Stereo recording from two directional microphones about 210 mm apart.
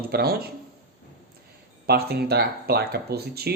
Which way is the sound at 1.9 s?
50° right (ahead or behind).